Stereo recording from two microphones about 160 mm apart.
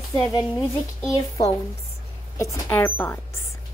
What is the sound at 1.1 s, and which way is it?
A woman's voice, 20° left (ahead or behind).